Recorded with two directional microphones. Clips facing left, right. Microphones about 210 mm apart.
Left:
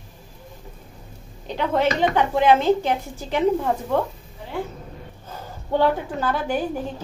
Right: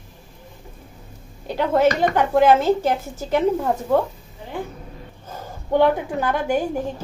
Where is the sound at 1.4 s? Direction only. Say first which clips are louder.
Right 4 dB; 10° right (ahead or behind).